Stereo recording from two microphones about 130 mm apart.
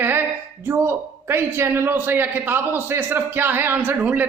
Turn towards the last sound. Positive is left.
turn(degrees=-15)  # may be behind; listen again after turning